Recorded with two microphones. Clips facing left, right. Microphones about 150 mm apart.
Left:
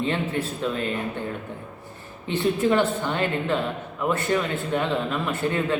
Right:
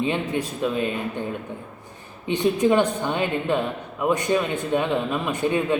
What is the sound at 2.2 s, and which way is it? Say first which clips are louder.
Speech: right 2 dB; 15° right (ahead or behind).